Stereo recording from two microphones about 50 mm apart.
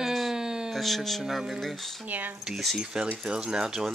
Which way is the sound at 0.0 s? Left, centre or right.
Centre.